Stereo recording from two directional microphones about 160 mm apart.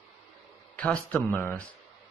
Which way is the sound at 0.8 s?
10° left (ahead or behind).